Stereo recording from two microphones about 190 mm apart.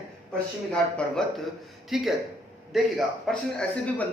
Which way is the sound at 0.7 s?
5° left (ahead or behind).